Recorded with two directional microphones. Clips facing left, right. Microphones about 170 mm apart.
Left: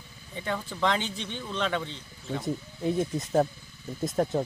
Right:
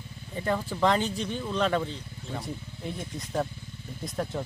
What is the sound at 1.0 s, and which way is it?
Speech, 40° right (ahead or behind).